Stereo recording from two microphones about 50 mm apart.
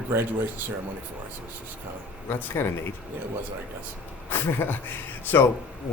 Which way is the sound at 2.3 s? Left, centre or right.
Left.